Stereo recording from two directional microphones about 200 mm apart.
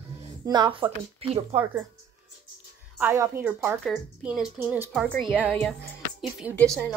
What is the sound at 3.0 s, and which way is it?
A woman's voice, 10° right (ahead or behind).